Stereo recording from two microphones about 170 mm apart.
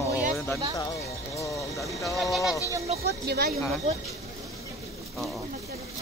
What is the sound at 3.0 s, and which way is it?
Speech, 70° right (ahead or behind).